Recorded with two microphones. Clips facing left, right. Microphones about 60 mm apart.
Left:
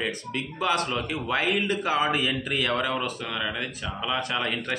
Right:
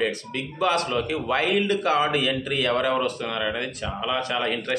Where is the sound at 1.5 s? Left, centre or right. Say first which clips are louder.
Right 4 dB; centre.